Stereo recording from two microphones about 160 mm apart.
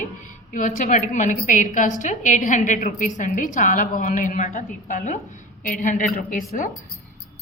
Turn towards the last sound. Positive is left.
turn(degrees=60)  # may be behind; listen again after turning